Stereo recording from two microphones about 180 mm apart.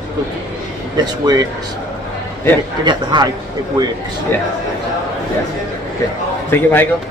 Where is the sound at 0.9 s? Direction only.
20° right (ahead or behind).